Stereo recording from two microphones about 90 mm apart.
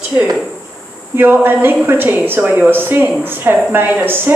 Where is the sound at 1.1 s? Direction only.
25° right (ahead or behind).